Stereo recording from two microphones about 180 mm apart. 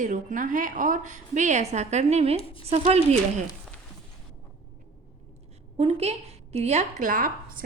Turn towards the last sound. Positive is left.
turn(degrees=-50)  # may be behind; listen again after turning